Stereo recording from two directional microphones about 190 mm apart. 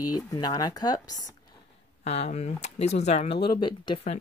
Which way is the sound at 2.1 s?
35° left (ahead or behind).